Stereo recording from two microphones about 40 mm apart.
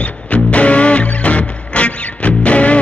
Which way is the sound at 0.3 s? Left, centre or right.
Left.